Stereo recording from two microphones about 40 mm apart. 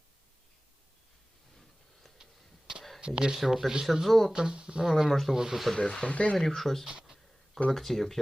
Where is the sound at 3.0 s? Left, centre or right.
Right.